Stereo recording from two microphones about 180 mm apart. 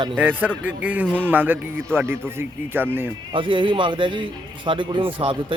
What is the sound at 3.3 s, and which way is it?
A man's voice, 30° right (ahead or behind).